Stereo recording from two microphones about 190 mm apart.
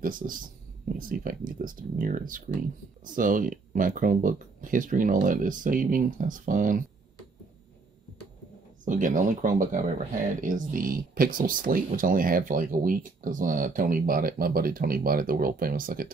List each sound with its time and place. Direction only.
0.0 s speech: 45° right (ahead or behind)
8.8 s speech: 45° right (ahead or behind)